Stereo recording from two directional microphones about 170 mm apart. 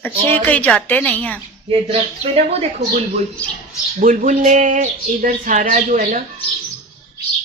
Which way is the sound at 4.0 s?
55° right (ahead or behind).